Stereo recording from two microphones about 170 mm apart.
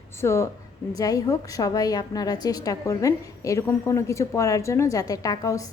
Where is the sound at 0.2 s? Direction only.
15° left (ahead or behind).